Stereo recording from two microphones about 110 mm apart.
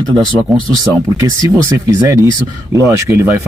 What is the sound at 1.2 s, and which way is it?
A man's voice, 30° right (ahead or behind).